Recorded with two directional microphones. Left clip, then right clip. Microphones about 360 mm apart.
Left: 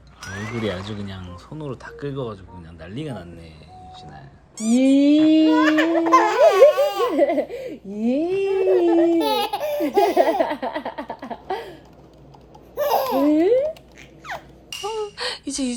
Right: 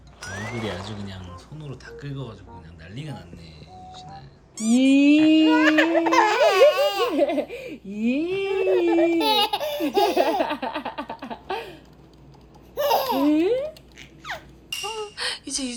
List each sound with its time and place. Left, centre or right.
1.0 s speech: centre
4.5 s speech: centre
7.9 s speech: right
8.3 s speech: centre
11.3 s a sound: centre
12.7 s baby laughter: centre
14.3 s a sound: centre